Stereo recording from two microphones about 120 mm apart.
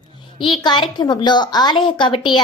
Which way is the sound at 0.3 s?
45° left (ahead or behind).